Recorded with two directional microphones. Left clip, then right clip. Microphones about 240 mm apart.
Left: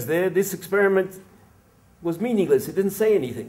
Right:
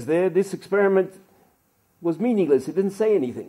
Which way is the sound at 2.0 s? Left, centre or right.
Right.